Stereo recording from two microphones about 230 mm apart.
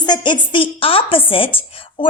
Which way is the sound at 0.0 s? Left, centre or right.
Centre.